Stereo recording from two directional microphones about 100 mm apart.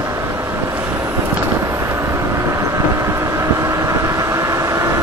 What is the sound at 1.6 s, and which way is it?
Vehicle, 30° right (ahead or behind).